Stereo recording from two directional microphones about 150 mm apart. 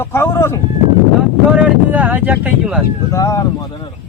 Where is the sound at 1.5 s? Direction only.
10° right (ahead or behind).